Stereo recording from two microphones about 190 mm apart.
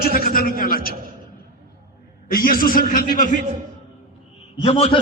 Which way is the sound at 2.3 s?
50° left (ahead or behind).